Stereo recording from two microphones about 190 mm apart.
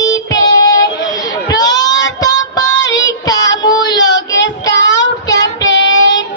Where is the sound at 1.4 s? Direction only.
20° left (ahead or behind).